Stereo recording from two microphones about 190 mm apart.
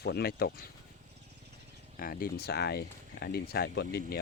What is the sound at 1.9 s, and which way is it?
Speech, 50° left (ahead or behind).